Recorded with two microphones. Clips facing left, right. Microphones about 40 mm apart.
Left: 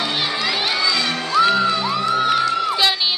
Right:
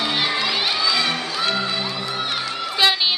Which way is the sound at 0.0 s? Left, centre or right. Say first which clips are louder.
Even; centre.